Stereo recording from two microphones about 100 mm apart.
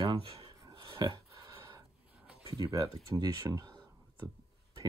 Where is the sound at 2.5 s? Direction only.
40° right (ahead or behind).